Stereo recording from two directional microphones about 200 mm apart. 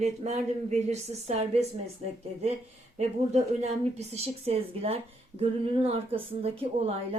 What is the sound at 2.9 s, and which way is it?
A woman's voice, 35° right (ahead or behind).